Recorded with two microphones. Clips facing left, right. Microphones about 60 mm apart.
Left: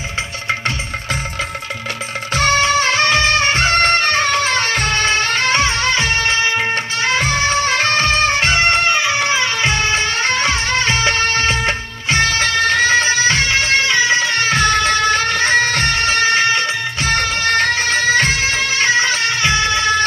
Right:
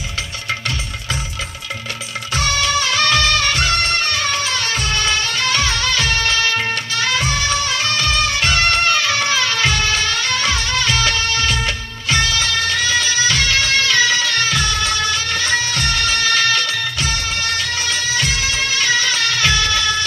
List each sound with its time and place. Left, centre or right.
2.3 s music of bollywood: left
17.1 s music: left